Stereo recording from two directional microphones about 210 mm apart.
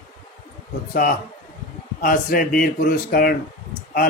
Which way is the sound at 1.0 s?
40° left (ahead or behind).